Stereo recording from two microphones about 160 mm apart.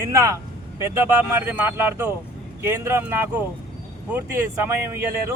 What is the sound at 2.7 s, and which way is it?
Speech, 15° right (ahead or behind).